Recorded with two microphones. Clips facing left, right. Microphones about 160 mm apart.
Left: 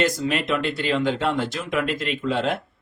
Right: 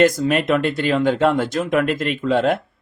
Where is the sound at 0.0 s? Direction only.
50° right (ahead or behind).